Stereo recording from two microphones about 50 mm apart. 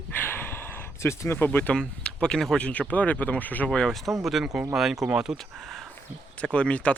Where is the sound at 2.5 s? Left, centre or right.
Left.